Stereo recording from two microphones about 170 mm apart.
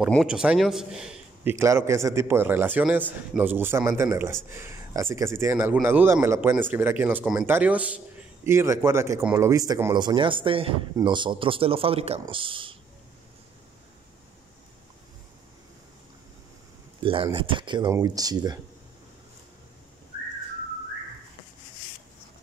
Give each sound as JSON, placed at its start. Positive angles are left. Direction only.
{"t": 0.1, "sound": "a man's voice", "side_deg": 0}
{"t": 17.0, "sound": "speech", "side_deg": -30}